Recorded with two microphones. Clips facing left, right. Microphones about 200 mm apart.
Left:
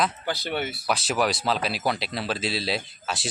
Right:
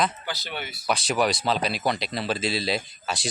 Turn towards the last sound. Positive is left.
turn(degrees=0)  # may be behind; listen again after turning